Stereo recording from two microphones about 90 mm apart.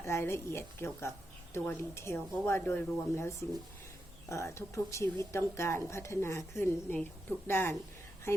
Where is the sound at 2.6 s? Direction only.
15° left (ahead or behind).